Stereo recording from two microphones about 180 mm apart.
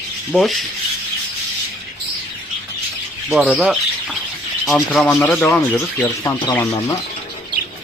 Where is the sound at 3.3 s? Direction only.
5° right (ahead or behind).